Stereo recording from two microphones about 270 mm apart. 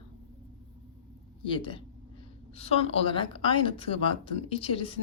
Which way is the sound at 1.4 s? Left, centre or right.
Centre.